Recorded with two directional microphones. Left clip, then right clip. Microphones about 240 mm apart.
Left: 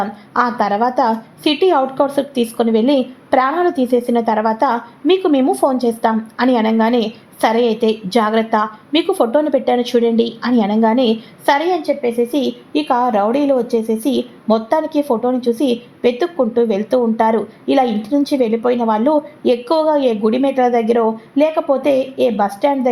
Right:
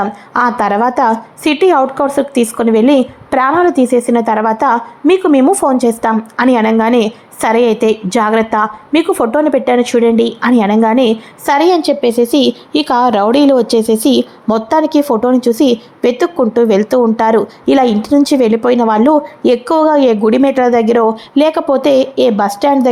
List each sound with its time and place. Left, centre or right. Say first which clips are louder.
0.0 s a woman's voice: right 4 dB; right